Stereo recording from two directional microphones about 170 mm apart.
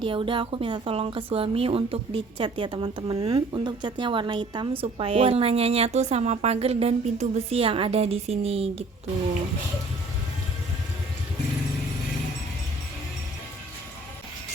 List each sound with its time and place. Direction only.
0.0 s a woman's voice: 30° right (ahead or behind)